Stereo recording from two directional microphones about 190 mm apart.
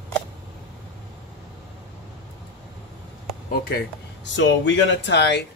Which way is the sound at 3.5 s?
50° left (ahead or behind).